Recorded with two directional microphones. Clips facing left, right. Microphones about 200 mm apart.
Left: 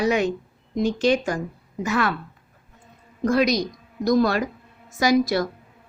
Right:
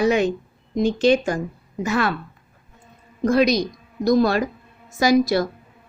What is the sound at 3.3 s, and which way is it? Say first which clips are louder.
A woman's voice: right 2 dB; 25° right (ahead or behind).